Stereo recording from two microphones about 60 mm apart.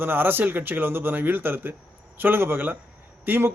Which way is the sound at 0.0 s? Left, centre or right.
Right.